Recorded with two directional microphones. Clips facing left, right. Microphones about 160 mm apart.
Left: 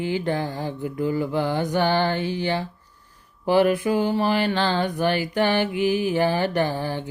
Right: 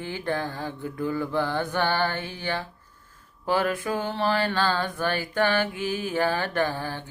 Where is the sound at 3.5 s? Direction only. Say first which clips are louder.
Left 6 dB; 15° left (ahead or behind).